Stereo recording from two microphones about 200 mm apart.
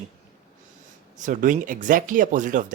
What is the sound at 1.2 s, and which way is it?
Speech, 40° right (ahead or behind).